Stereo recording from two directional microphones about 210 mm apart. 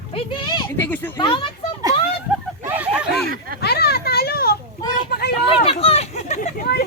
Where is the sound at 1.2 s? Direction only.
20° left (ahead or behind).